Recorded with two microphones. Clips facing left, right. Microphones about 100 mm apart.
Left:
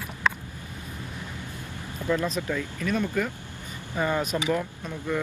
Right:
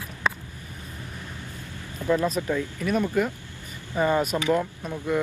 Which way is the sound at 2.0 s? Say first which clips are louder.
Right 3 dB; 20° right (ahead or behind).